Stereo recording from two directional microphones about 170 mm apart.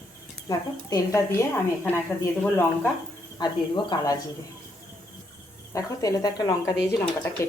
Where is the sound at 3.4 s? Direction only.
25° left (ahead or behind).